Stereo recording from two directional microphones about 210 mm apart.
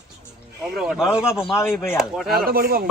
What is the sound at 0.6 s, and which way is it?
Speech, centre (ahead or behind).